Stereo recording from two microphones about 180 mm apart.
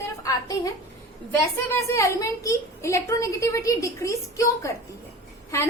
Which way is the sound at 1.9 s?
15° left (ahead or behind).